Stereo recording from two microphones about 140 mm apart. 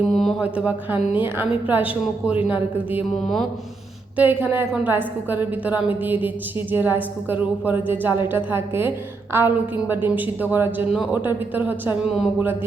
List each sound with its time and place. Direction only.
0.0 s a sound: centre (ahead or behind)
0.4 s a woman's voice: 10° right (ahead or behind)
4.2 s a woman's voice: 15° right (ahead or behind)